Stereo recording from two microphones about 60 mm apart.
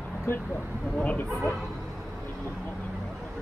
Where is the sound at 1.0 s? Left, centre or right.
Left.